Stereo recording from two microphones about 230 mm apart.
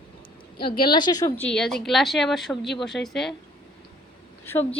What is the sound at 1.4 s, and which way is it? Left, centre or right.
A woman's voice, centre.